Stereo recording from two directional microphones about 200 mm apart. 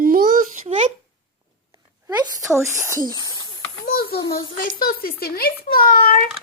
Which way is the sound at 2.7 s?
15° right (ahead or behind).